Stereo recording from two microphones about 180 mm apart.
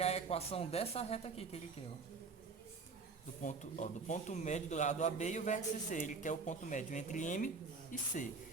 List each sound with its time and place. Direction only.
0.0 s speech: 35° left (ahead or behind)
3.4 s a man's voice: 45° left (ahead or behind)